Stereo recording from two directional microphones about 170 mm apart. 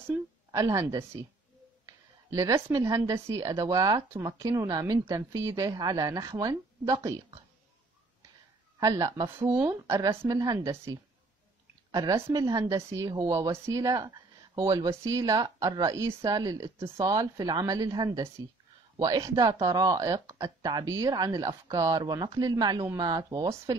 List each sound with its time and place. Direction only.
0.1 s speech: 20° right (ahead or behind)
2.3 s a woman's voice: 20° right (ahead or behind)
8.7 s a woman's voice: 20° right (ahead or behind)